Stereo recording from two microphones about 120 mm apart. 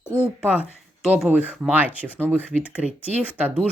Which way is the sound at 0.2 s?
10° right (ahead or behind).